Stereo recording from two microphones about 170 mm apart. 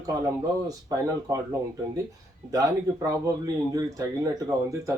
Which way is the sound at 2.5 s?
20° right (ahead or behind).